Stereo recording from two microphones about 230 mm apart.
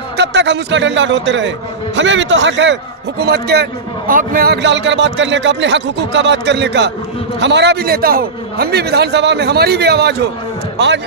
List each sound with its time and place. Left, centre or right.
0.2 s a man's voice: right